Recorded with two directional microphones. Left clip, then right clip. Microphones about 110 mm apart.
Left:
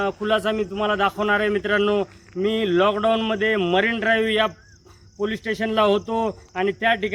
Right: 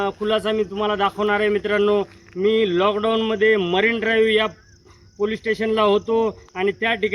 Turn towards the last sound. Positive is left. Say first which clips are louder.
# even
turn(degrees=50)  # may be behind; listen again after turning